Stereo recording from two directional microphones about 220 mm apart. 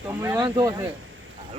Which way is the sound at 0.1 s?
10° right (ahead or behind).